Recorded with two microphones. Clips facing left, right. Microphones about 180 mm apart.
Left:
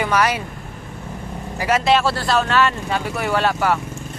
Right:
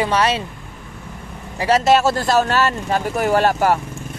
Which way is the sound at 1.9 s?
45° right (ahead or behind).